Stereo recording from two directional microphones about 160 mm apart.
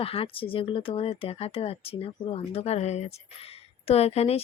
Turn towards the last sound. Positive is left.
turn(degrees=40)  # may be behind; listen again after turning